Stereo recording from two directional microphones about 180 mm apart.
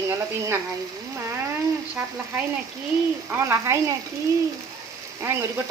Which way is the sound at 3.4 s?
15° right (ahead or behind).